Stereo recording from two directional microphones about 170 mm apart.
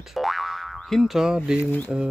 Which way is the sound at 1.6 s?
10° left (ahead or behind).